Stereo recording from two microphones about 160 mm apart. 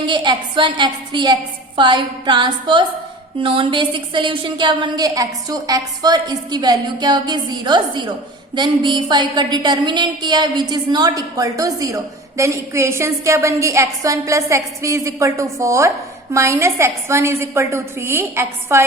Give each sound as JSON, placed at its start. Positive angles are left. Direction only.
{"t": 0.0, "sound": "a woman's voice", "side_deg": -30}